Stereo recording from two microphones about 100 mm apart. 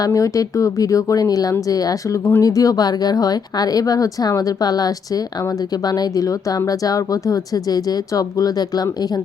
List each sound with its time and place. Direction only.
0.0 s speech: 35° left (ahead or behind)